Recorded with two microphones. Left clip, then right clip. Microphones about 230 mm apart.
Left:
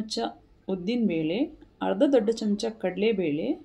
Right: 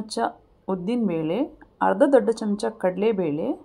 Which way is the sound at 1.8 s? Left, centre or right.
Centre.